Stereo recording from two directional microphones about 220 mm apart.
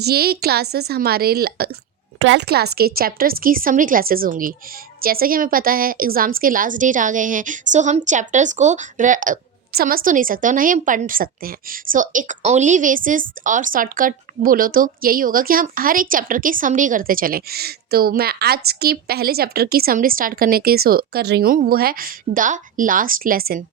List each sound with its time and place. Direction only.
0.0 s a woman's voice: 45° right (ahead or behind)
2.1 s a woman's voice: 55° right (ahead or behind)